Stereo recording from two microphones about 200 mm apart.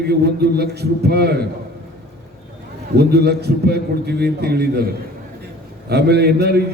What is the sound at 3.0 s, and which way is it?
A man's voice, 55° right (ahead or behind).